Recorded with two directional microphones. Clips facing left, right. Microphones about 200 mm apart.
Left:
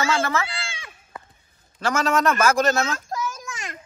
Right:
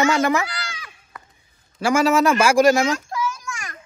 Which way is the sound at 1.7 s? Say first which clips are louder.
Right 5 dB; 10° right (ahead or behind).